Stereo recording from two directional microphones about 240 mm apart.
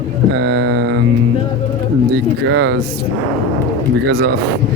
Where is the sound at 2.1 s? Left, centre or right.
Right.